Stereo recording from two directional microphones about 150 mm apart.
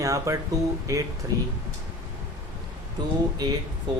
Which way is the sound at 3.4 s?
25° right (ahead or behind).